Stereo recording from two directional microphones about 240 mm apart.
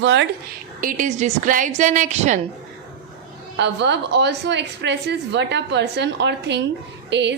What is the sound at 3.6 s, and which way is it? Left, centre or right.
A woman's voice, right.